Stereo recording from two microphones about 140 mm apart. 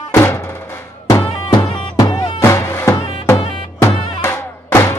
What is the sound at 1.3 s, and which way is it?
Music, 40° left (ahead or behind).